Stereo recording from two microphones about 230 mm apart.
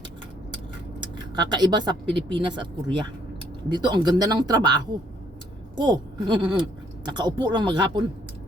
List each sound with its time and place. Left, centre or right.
1.1 s speech: centre